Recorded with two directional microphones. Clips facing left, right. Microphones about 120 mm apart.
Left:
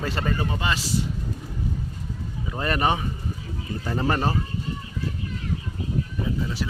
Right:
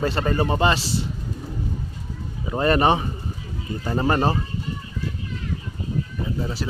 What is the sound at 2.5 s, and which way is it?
Speech, 30° right (ahead or behind).